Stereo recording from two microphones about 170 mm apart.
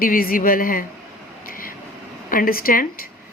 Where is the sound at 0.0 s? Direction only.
60° left (ahead or behind).